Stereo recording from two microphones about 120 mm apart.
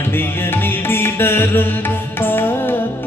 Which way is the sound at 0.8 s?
20° left (ahead or behind).